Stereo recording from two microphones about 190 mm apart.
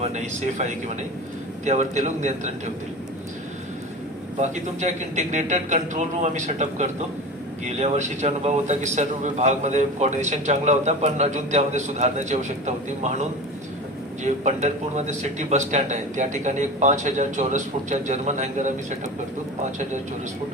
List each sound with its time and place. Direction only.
0.0 s a man's voice: 35° right (ahead or behind)
4.4 s a man's voice: 40° right (ahead or behind)
14.3 s a man's voice: 40° right (ahead or behind)